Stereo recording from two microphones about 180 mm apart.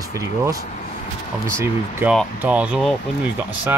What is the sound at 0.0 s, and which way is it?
Speech, 20° right (ahead or behind).